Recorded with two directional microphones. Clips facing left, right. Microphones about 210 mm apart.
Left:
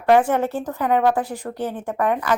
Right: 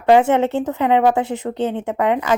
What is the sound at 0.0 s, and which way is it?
Speech, 25° right (ahead or behind).